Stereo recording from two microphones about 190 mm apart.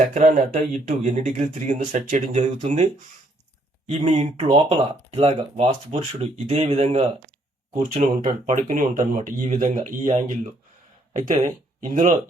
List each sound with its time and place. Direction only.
0.1 s speech: 40° right (ahead or behind)
4.0 s speech: 35° right (ahead or behind)